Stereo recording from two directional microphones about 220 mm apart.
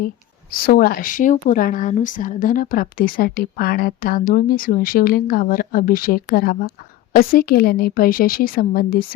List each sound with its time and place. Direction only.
0.5 s a woman's voice: 45° left (ahead or behind)